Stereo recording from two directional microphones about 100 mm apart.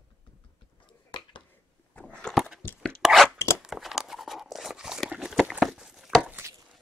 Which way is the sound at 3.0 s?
5° right (ahead or behind).